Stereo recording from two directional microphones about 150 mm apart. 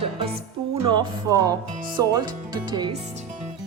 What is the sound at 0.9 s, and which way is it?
Speech, 25° right (ahead or behind).